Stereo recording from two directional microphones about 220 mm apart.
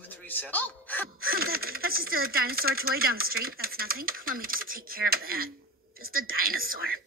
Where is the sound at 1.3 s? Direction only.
45° right (ahead or behind).